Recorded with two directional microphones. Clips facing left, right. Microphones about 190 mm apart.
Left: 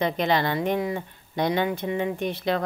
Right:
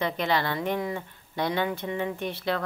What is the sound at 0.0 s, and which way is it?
Speech, 20° left (ahead or behind).